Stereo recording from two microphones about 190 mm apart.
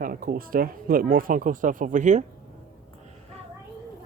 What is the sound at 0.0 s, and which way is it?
Speech, 50° right (ahead or behind).